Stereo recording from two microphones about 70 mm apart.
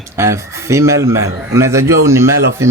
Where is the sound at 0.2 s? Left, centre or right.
Right.